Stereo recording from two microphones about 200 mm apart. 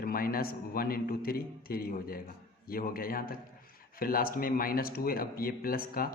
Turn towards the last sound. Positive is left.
turn(degrees=45)  # may be behind; listen again after turning